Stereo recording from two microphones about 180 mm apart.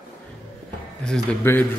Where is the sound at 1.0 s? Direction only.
10° left (ahead or behind).